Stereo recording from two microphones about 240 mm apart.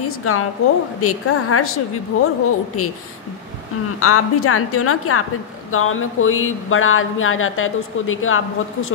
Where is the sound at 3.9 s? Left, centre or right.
Left.